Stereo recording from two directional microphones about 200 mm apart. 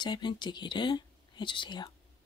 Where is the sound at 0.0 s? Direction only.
20° left (ahead or behind).